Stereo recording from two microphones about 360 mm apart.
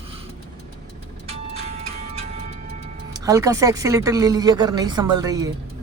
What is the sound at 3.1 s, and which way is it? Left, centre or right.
Speech, centre.